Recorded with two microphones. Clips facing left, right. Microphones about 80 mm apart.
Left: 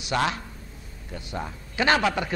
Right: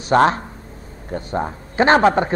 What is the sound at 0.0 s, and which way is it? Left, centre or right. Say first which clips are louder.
A man's voice: right 11 dB; right.